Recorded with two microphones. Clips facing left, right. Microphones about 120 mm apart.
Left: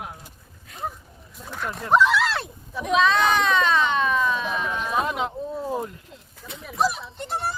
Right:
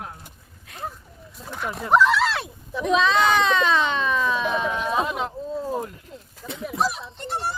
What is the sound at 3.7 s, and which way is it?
Speech, centre (ahead or behind).